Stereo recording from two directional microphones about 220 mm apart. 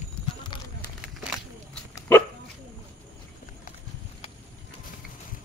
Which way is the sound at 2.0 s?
10° left (ahead or behind).